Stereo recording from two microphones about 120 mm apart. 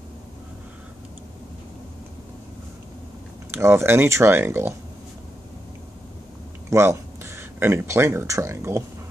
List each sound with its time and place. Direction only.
3.5 s speech: 20° right (ahead or behind)
6.7 s speech: 25° right (ahead or behind)